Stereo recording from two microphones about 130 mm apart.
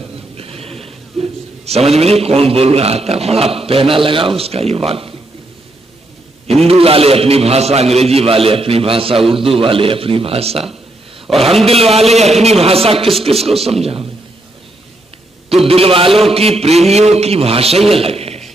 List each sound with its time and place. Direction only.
0.4 s a man's voice: 50° right (ahead or behind)
6.4 s a man's voice: 50° right (ahead or behind)
11.3 s a man's voice: centre (ahead or behind)
11.6 s a man's voice: 50° right (ahead or behind)
15.6 s a man's voice: 45° right (ahead or behind)